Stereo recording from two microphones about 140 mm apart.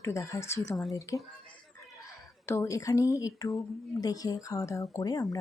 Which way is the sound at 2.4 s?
20° left (ahead or behind).